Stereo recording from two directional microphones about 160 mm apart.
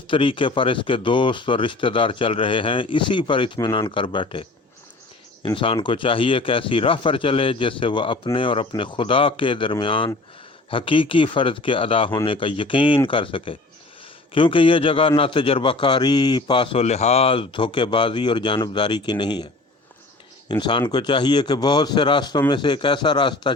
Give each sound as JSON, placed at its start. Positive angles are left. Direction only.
{"t": 0.1, "sound": "a man's voice", "side_deg": 35}
{"t": 20.5, "sound": "speech", "side_deg": 30}